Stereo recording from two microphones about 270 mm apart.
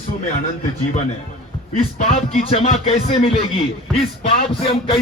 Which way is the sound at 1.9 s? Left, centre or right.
Left.